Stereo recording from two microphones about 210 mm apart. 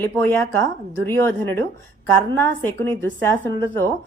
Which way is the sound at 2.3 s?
10° left (ahead or behind).